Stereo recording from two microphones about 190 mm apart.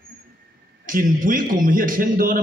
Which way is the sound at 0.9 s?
45° right (ahead or behind).